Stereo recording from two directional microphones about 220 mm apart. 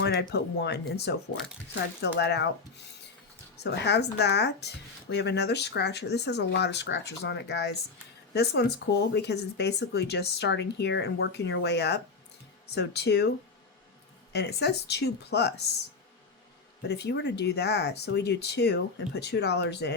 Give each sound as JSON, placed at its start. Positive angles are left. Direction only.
{"t": 0.0, "sound": "speech", "side_deg": 50}
{"t": 3.6, "sound": "speech", "side_deg": 50}
{"t": 14.3, "sound": "speech", "side_deg": 50}
{"t": 16.9, "sound": "speech", "side_deg": 50}